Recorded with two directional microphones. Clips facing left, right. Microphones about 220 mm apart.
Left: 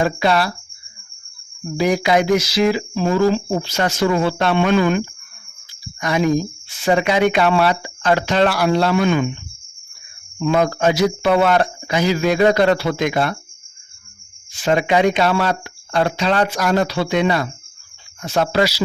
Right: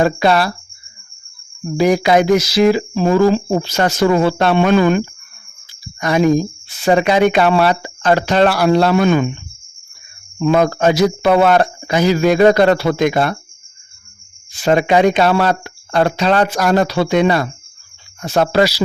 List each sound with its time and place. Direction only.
0.0 s speech: 40° right (ahead or behind)
1.8 s speech: 40° right (ahead or behind)
10.4 s speech: 45° right (ahead or behind)
14.6 s speech: 40° right (ahead or behind)